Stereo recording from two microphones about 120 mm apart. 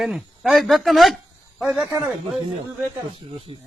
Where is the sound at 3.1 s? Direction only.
55° right (ahead or behind).